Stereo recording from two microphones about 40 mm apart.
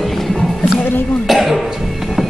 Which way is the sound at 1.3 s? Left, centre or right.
Centre.